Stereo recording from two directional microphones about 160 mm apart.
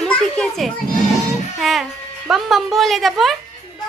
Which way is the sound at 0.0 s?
5° left (ahead or behind).